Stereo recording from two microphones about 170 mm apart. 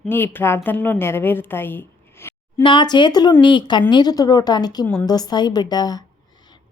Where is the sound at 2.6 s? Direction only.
25° left (ahead or behind).